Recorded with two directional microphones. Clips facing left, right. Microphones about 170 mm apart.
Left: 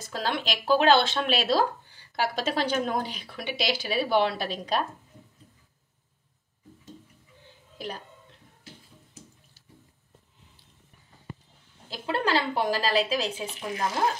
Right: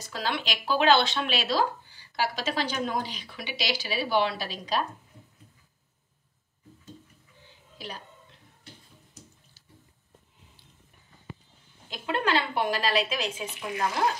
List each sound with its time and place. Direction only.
0.0 s speech: 45° left (ahead or behind)
7.7 s a sound: 50° left (ahead or behind)
11.9 s a woman's voice: 35° left (ahead or behind)